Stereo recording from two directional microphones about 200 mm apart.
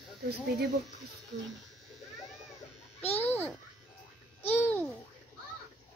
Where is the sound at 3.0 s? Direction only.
10° left (ahead or behind).